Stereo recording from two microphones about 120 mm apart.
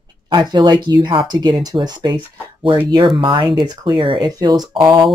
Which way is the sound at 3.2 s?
45° right (ahead or behind).